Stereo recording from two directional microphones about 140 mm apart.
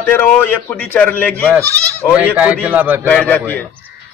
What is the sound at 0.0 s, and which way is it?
A man's voice, 15° left (ahead or behind).